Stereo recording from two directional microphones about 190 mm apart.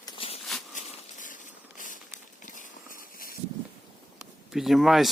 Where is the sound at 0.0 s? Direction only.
30° left (ahead or behind).